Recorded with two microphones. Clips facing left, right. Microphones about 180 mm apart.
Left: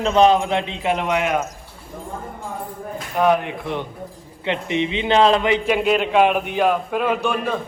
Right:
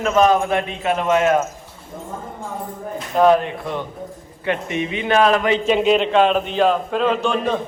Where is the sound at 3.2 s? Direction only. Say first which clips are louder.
Right 3 dB; 15° left (ahead or behind).